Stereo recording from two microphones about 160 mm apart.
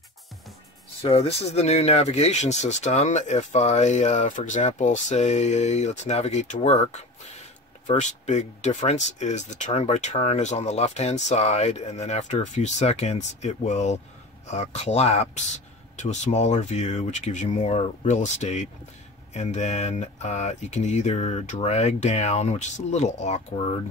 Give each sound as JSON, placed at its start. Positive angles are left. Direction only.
{"t": 1.0, "sound": "speech", "side_deg": 40}